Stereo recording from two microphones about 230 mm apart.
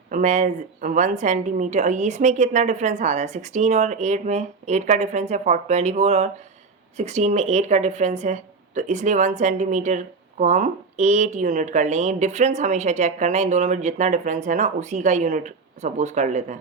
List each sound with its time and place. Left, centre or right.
0.1 s speech: right